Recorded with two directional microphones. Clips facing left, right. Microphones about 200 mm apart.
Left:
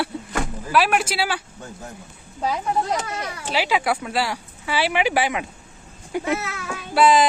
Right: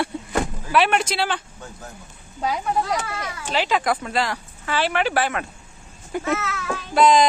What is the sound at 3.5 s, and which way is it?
A man's voice, 10° left (ahead or behind).